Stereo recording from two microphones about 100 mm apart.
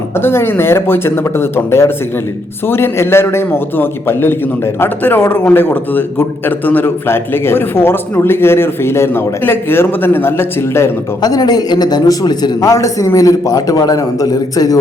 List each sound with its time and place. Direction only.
0.2 s a man's voice: 25° left (ahead or behind)
11.2 s a man's voice: 40° left (ahead or behind)